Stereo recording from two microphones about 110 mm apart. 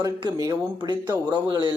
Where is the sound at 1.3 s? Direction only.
45° right (ahead or behind).